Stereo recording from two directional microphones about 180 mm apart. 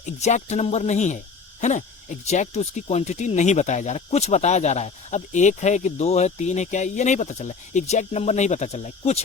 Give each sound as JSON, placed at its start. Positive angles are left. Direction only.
{"t": 0.0, "sound": "speech", "side_deg": 40}